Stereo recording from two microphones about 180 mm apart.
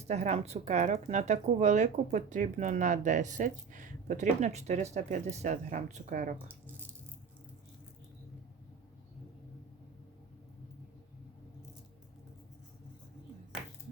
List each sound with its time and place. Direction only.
0.0 s a woman's voice: 40° right (ahead or behind)